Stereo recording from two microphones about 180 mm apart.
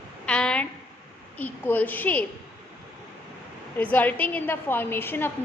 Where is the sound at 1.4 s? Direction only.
10° left (ahead or behind).